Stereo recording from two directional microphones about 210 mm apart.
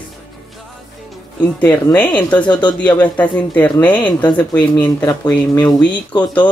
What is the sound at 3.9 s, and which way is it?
Speech, 20° left (ahead or behind).